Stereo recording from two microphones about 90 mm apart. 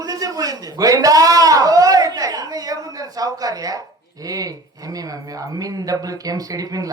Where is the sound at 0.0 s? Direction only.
40° right (ahead or behind).